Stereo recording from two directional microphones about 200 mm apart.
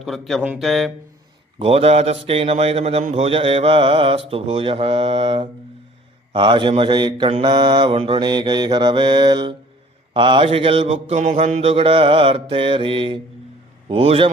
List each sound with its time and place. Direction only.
0.0 s speech: centre (ahead or behind)
1.5 s a man's voice: 30° right (ahead or behind)